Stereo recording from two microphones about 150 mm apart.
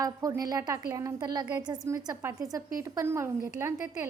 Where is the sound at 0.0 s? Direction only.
25° right (ahead or behind).